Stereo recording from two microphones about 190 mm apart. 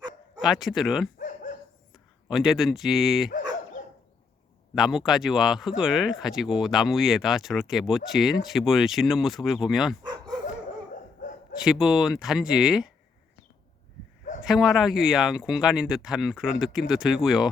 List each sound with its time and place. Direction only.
0.3 s speech: centre (ahead or behind)
1.2 s dog: 45° left (ahead or behind)
2.2 s speech: centre (ahead or behind)
3.8 s dog: 40° left (ahead or behind)
4.7 s speech: centre (ahead or behind)
10.0 s dog: 20° right (ahead or behind)
11.6 s speech: 5° right (ahead or behind)
14.4 s speech: centre (ahead or behind)